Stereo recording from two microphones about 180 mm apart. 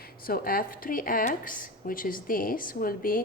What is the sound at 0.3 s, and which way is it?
Speech, 55° left (ahead or behind).